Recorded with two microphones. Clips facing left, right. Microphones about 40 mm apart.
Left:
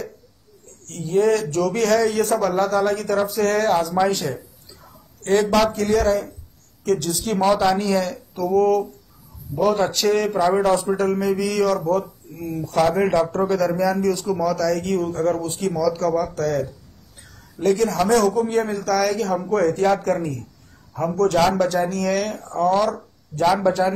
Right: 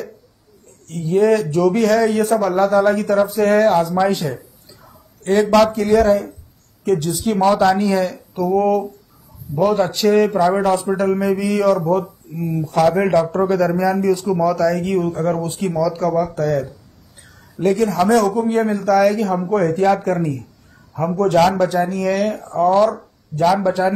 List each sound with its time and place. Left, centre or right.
1.0 s speech: centre
4.8 s a sound: centre
5.6 s speech: centre
17.6 s speech: centre
23.4 s speech: centre